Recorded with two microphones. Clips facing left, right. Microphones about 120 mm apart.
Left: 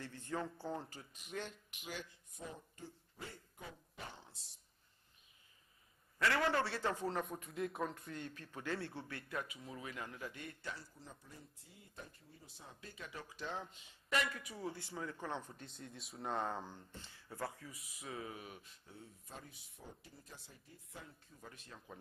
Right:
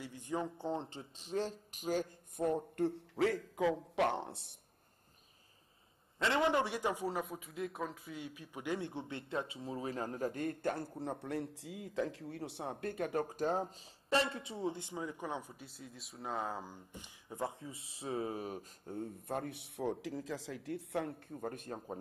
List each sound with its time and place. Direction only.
0.0 s speech: 15° right (ahead or behind); by 4.6 s 60° right (ahead or behind)
6.1 s a man's voice: 20° right (ahead or behind); by 21.9 s 45° right (ahead or behind)